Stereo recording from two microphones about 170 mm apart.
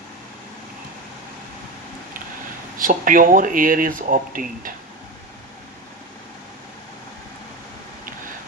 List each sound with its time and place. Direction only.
2.7 s speech: 55° right (ahead or behind)